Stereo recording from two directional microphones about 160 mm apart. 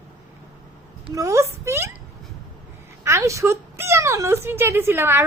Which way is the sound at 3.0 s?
20° right (ahead or behind).